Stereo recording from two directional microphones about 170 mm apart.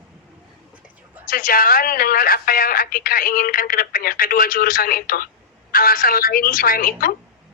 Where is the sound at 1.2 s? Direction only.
55° left (ahead or behind).